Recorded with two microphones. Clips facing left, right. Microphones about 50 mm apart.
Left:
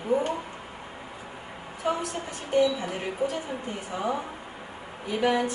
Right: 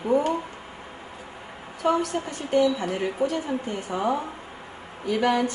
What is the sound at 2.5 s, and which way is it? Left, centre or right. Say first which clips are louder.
A woman's voice: right 2 dB; centre.